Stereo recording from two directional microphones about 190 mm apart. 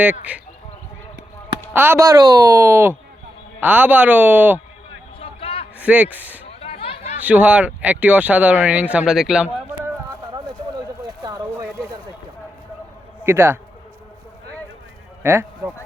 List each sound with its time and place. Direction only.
0.0 s speech: 5° right (ahead or behind)
1.7 s speech: 10° right (ahead or behind)
5.2 s a sound: 30° left (ahead or behind)
5.8 s speech: 5° right (ahead or behind)
6.4 s a sound: 30° left (ahead or behind)
7.2 s speech: 10° right (ahead or behind)
11.2 s a sound: 20° right (ahead or behind)
13.2 s speech: 10° right (ahead or behind)
15.2 s speech: 15° right (ahead or behind)